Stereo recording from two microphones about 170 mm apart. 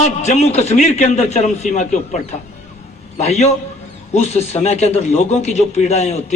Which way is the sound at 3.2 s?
40° left (ahead or behind).